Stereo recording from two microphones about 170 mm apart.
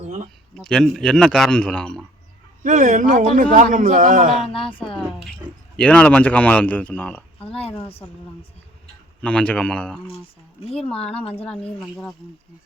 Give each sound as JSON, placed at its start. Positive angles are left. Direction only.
{"t": 0.5, "sound": "a man's voice", "side_deg": 5}
{"t": 2.6, "sound": "a man's voice", "side_deg": -45}
{"t": 4.5, "sound": "a woman's voice", "side_deg": 30}
{"t": 5.7, "sound": "speech", "side_deg": 5}
{"t": 9.2, "sound": "speech", "side_deg": 5}
{"t": 10.6, "sound": "a woman's voice", "side_deg": 35}
{"t": 11.8, "sound": "a man's voice", "side_deg": 5}